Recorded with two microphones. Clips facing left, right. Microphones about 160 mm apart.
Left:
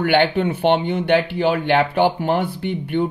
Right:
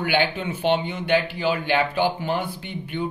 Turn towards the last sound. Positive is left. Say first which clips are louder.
# left 8 dB
turn(degrees=60)  # may be behind; listen again after turning